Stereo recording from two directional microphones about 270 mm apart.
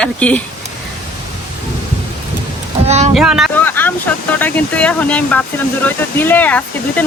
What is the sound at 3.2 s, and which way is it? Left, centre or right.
Speech, centre.